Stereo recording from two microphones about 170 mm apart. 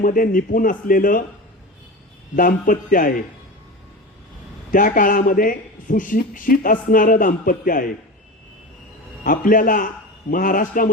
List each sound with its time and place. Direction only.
0.0 s a man's voice: 55° left (ahead or behind)
2.3 s a man's voice: 55° left (ahead or behind)
4.7 s a man's voice: 50° left (ahead or behind)
9.2 s a man's voice: 55° left (ahead or behind)